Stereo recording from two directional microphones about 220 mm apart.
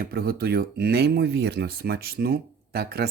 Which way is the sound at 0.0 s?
45° right (ahead or behind).